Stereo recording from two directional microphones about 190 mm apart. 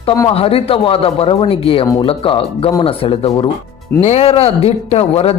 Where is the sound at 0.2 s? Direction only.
30° left (ahead or behind).